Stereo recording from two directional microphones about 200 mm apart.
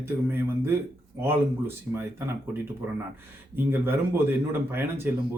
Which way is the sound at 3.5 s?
10° right (ahead or behind).